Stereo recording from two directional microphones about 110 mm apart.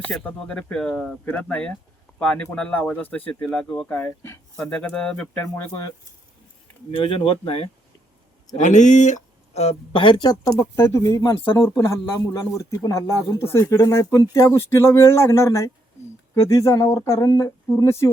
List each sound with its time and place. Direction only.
0.1 s speech: 5° left (ahead or behind)
1.2 s speech: 15° left (ahead or behind)
4.6 s speech: 10° left (ahead or behind)
6.9 s speech: 55° left (ahead or behind)
8.5 s speech: 90° left; by 10.3 s 45° left (ahead or behind)
10.4 s speech: 25° left (ahead or behind)
11.0 s speech: 40° left (ahead or behind)
11.3 s speech: 25° left (ahead or behind)